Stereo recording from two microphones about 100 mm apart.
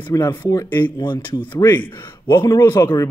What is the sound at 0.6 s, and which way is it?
Speech, 20° left (ahead or behind).